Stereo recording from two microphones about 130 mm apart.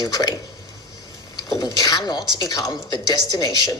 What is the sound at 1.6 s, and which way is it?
Speech, 30° left (ahead or behind).